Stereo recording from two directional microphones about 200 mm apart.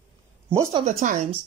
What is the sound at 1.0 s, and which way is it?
Speech, 35° right (ahead or behind).